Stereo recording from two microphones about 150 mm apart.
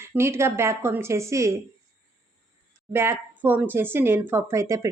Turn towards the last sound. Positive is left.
turn(degrees=-20)  # may be behind; listen again after turning